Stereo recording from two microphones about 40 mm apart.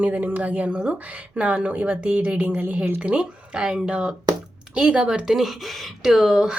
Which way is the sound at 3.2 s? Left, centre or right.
Right.